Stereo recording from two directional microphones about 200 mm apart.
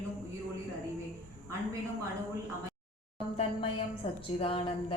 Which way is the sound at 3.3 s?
30° left (ahead or behind).